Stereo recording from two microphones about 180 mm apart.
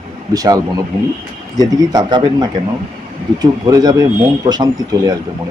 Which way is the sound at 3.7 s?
20° right (ahead or behind).